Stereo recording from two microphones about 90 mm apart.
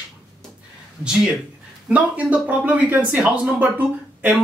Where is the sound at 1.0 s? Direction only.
10° right (ahead or behind).